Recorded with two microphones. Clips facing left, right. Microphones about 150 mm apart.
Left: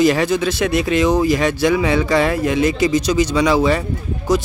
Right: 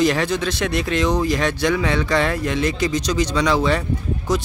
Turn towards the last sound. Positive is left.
turn(degrees=5)  # may be behind; listen again after turning